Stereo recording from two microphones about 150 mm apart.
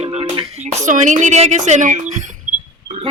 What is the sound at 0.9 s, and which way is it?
Speech, 55° right (ahead or behind).